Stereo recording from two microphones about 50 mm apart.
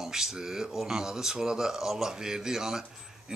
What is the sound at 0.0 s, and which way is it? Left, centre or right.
Speech, centre.